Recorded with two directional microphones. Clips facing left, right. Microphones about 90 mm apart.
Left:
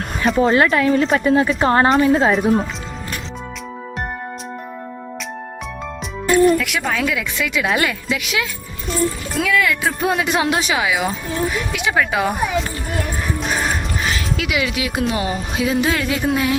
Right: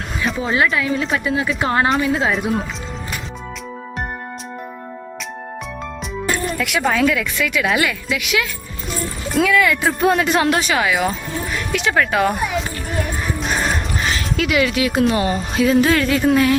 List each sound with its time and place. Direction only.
0.3 s a woman's voice: 45° left (ahead or behind)
2.3 s speech: centre (ahead or behind)
6.6 s speech: centre (ahead or behind)
7.1 s a woman's voice: 15° left (ahead or behind); by 8.4 s 30° left (ahead or behind)
9.3 s speech: centre (ahead or behind)
13.6 s music: 5° left (ahead or behind)
15.1 s speech: 10° left (ahead or behind)